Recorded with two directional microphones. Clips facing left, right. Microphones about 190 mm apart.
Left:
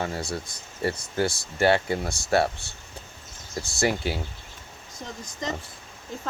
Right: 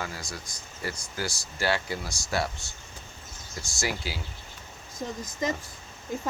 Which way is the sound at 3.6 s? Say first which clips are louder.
Left 7 dB; 60° left (ahead or behind).